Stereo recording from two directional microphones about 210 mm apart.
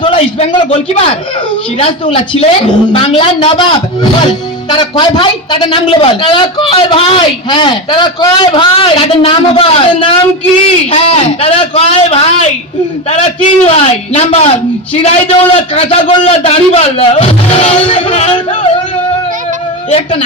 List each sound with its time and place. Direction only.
0.0 s a man's voice: 25° left (ahead or behind)
19.9 s a man's voice: 30° left (ahead or behind)